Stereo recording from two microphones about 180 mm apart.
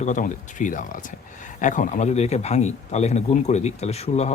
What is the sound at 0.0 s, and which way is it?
A man's voice, 45° left (ahead or behind).